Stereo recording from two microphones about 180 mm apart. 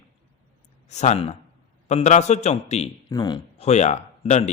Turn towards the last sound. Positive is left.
turn(degrees=40)  # may be behind; listen again after turning